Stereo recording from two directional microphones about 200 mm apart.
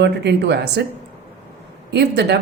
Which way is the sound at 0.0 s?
60° right (ahead or behind).